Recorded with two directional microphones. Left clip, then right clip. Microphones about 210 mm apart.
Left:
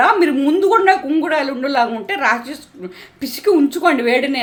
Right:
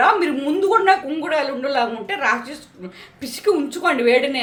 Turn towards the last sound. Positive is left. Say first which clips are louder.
# left 2 dB
turn(degrees=30)  # may be behind; listen again after turning